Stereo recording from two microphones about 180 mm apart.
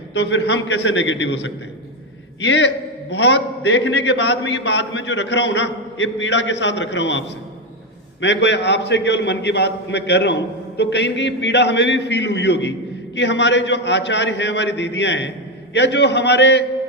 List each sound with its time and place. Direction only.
0.1 s a man's voice: 70° left (ahead or behind)